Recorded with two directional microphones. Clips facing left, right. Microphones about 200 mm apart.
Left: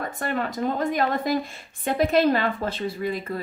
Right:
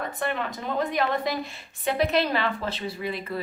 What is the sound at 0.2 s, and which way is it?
Speech, 45° left (ahead or behind).